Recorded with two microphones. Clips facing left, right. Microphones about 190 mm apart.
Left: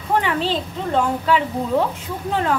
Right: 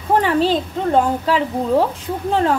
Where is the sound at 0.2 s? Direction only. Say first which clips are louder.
Right 6 dB; 40° right (ahead or behind).